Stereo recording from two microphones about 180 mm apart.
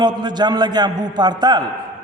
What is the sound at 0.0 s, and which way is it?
A man's voice, 25° right (ahead or behind).